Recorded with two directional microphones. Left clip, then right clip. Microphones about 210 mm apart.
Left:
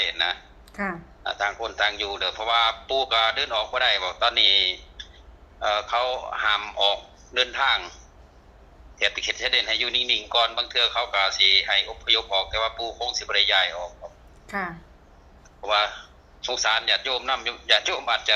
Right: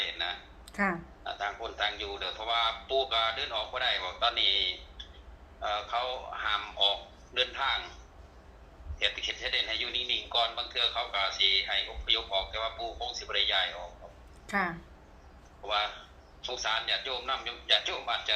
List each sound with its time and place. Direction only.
0.0 s a sound: 50° left (ahead or behind)
0.7 s speech: 5° right (ahead or behind)
1.2 s a man's voice: 50° left (ahead or behind)
9.0 s a man's voice: 50° left (ahead or behind)
14.4 s speech: centre (ahead or behind)
15.6 s a man's voice: 50° left (ahead or behind)